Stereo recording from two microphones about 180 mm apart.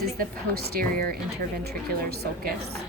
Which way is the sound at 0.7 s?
55° right (ahead or behind).